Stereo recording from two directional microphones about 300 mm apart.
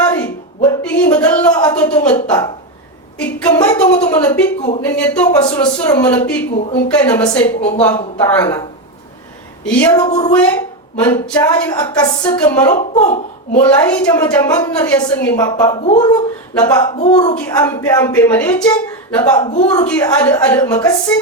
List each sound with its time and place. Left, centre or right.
0.6 s a woman's voice: centre
3.2 s a woman's voice: centre
9.6 s a woman's voice: centre
10.0 s speech: left
10.3 s a woman's voice: centre
12.6 s speech: left
13.7 s a woman's voice: centre